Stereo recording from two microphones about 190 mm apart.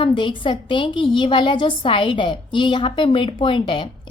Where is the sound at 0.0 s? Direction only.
25° left (ahead or behind).